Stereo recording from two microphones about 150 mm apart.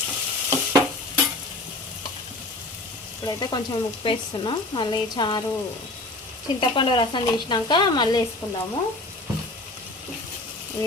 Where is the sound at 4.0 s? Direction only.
35° left (ahead or behind).